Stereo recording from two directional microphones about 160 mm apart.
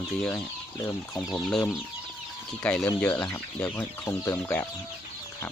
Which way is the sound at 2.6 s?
10° left (ahead or behind).